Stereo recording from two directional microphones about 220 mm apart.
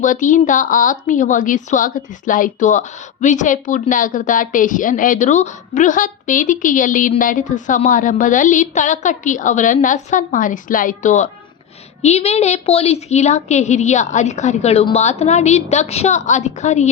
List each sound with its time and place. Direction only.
0.0 s speech: 35° left (ahead or behind)